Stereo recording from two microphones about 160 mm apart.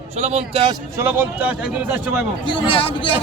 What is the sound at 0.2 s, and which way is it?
Speech, 40° right (ahead or behind).